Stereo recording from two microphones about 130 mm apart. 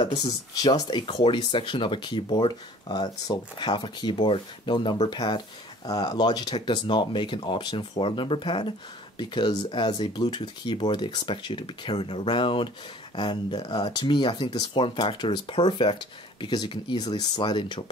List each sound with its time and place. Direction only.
0.2 s speech: 30° left (ahead or behind)